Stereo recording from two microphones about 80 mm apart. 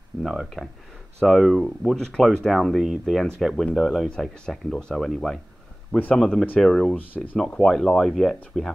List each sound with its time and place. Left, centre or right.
0.2 s speech: centre
6.6 s speech: centre